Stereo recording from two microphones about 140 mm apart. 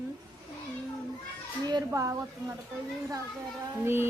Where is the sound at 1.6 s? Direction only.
25° right (ahead or behind).